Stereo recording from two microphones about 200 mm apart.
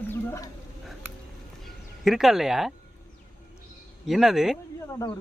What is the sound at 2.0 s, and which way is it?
Speech, centre (ahead or behind).